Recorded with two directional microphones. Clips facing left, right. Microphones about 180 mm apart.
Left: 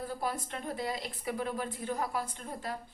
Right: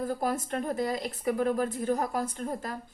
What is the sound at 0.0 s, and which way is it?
A woman's voice, 45° right (ahead or behind).